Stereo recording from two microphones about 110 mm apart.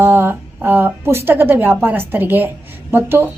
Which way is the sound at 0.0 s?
20° right (ahead or behind).